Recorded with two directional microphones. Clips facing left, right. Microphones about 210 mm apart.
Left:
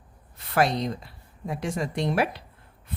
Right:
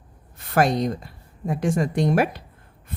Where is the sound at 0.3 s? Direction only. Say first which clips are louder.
Right 3 dB; 45° right (ahead or behind).